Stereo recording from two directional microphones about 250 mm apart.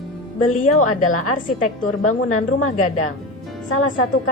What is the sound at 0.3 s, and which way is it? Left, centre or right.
A woman's voice, left.